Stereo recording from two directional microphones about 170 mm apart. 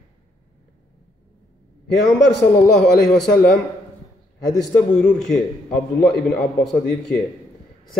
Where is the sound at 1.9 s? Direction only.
Centre (ahead or behind).